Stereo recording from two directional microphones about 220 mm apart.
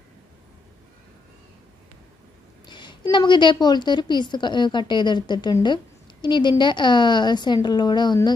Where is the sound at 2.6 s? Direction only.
20° left (ahead or behind).